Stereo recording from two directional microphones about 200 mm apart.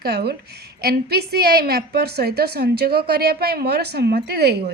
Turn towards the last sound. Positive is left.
turn(degrees=-55)  # may be behind; listen again after turning